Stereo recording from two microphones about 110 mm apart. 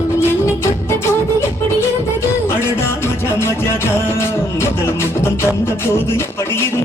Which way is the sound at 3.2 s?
25° left (ahead or behind).